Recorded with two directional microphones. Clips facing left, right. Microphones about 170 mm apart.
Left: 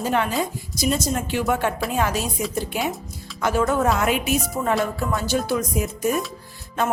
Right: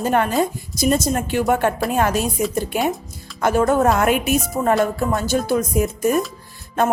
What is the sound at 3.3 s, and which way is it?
Speech, 50° right (ahead or behind).